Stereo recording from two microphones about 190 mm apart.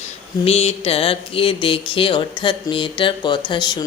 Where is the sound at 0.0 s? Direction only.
35° left (ahead or behind).